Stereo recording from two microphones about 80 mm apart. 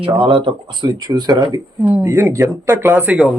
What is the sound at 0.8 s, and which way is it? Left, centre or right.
Speech, right.